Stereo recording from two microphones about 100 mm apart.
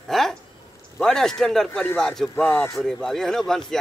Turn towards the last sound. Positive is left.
turn(degrees=5)  # may be behind; listen again after turning